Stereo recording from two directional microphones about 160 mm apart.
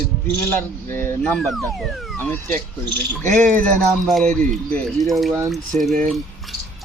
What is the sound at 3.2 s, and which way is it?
Speech, 50° right (ahead or behind).